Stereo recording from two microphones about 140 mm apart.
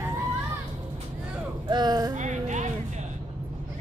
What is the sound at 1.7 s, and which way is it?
Speech, 30° right (ahead or behind).